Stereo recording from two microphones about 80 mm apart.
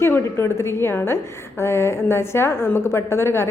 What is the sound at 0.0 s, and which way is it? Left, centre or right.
A woman's voice, left.